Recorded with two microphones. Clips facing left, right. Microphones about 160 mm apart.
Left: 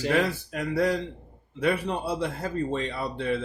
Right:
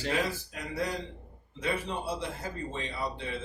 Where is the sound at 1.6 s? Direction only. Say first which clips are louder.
Left 7 dB; 65° left (ahead or behind).